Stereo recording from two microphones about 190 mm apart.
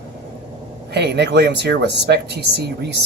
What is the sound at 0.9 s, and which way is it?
Speech, 60° right (ahead or behind).